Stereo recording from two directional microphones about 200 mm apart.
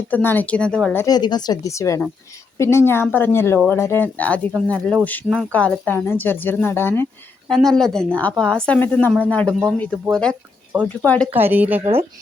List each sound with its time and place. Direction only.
0.1 s speech: 10° left (ahead or behind)
1.0 s speech: 20° left (ahead or behind)
11.3 s speech: 10° right (ahead or behind)